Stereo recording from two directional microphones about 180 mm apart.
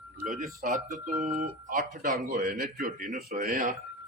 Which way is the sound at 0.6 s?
50° right (ahead or behind).